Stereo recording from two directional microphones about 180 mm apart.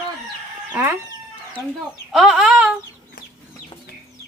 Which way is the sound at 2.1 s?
Centre (ahead or behind).